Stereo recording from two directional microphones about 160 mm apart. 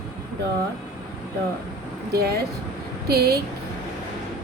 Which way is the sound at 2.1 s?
85° right.